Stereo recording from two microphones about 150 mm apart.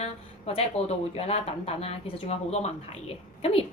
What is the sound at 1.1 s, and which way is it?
Speech, 40° left (ahead or behind).